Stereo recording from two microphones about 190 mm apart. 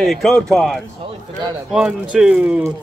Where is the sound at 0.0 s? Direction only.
Centre (ahead or behind).